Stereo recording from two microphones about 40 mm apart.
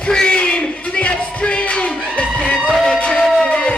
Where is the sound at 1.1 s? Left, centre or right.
Left.